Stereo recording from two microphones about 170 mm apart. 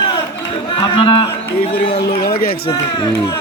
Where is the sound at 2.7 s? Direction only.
15° left (ahead or behind).